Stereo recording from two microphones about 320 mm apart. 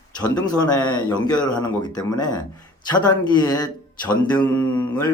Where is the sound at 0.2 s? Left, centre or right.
Centre.